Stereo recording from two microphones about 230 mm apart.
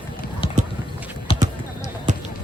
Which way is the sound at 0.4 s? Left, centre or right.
Left.